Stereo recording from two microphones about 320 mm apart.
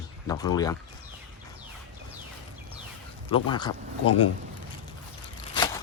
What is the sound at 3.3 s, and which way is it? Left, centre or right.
Speech, centre.